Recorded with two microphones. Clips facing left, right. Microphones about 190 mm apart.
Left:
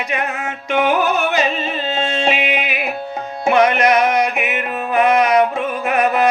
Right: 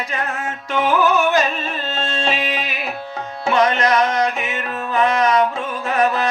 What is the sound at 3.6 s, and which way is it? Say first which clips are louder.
Music: left 3 dB; 15° left (ahead or behind).